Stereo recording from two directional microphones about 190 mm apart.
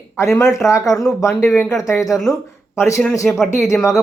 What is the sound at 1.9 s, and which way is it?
Speech, 15° left (ahead or behind).